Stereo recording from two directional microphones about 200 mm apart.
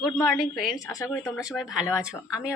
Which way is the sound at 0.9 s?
15° left (ahead or behind).